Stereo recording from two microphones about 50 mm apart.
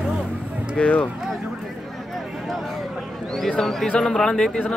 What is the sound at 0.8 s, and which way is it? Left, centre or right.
Speech, left.